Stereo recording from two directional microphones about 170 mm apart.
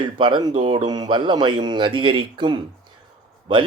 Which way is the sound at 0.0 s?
30° right (ahead or behind).